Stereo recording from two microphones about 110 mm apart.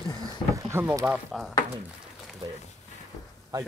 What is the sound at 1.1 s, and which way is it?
Speech, centre (ahead or behind).